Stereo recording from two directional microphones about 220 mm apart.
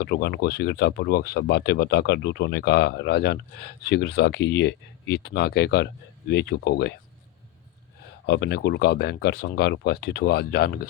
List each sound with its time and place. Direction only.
0.0 s speech: 50° left (ahead or behind)
8.3 s speech: 50° left (ahead or behind)